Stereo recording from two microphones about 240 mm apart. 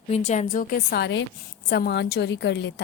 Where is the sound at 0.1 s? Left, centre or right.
Left.